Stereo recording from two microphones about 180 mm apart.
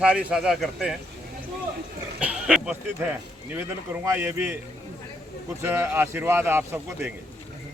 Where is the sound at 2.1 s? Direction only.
5° right (ahead or behind).